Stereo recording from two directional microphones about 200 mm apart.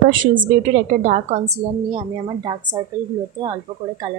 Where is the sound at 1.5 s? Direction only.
25° right (ahead or behind).